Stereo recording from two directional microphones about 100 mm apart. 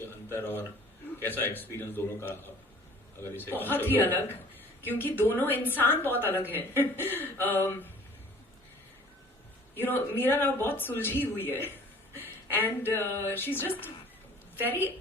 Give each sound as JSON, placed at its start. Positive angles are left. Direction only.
{"t": 0.0, "sound": "a sound", "side_deg": 25}
{"t": 1.2, "sound": "a woman's voice", "side_deg": 20}
{"t": 3.6, "sound": "a woman's voice", "side_deg": 20}
{"t": 9.7, "sound": "a woman's voice", "side_deg": 20}
{"t": 12.1, "sound": "a sound", "side_deg": 20}
{"t": 13.0, "sound": "a woman's voice", "side_deg": 25}